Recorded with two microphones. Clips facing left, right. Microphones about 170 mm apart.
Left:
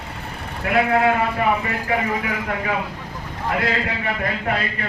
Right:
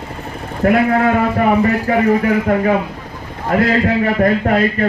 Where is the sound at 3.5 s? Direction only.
45° right (ahead or behind).